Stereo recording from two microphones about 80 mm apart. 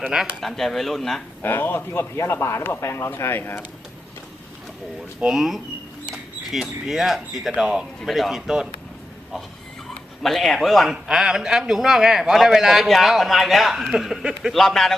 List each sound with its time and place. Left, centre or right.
0.0 s speech: centre
0.3 s speech: centre
1.4 s a man's voice: left
5.2 s speech: centre
8.0 s speech: centre
10.2 s speech: centre